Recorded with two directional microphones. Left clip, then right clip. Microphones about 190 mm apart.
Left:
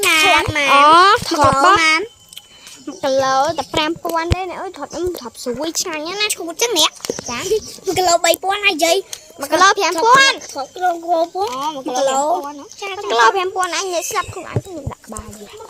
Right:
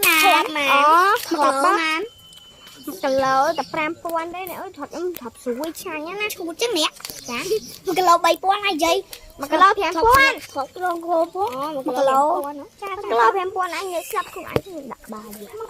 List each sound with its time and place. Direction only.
0.0 s a sound: 30° left (ahead or behind)
0.5 s speech: 50° left (ahead or behind)
2.8 s speech: 15° left (ahead or behind)
9.5 s speech: 15° left (ahead or behind)
11.6 s speech: 45° left (ahead or behind)
12.1 s speech: 25° left (ahead or behind)
13.1 s speech: 10° left (ahead or behind)